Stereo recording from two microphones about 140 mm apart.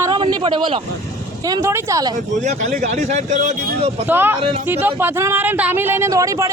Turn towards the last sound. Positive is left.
turn(degrees=-20)  # may be behind; listen again after turning